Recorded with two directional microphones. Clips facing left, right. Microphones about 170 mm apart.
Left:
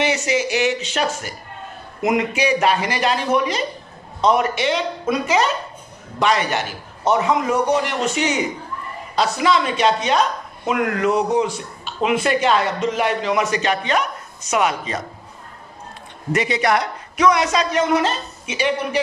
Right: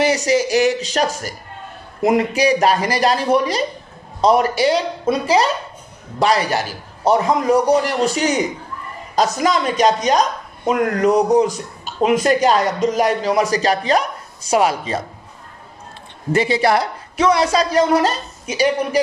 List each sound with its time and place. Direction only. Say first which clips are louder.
0.0 s speech: right 4 dB; 35° right (ahead or behind)
16.3 s speech: right 3 dB; 30° right (ahead or behind)